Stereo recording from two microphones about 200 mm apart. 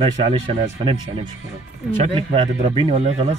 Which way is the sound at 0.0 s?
25° right (ahead or behind).